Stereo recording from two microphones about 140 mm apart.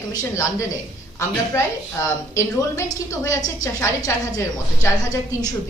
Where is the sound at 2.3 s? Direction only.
20° left (ahead or behind).